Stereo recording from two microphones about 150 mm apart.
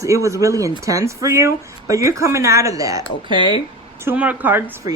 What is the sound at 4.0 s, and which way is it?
Speech, 10° right (ahead or behind).